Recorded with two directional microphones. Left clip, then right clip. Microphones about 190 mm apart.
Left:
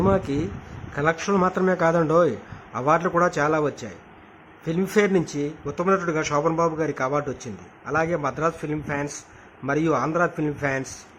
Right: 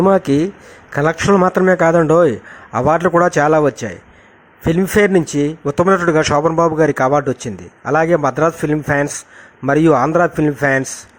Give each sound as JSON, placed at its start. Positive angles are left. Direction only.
{"t": 0.0, "sound": "a man's voice", "side_deg": -35}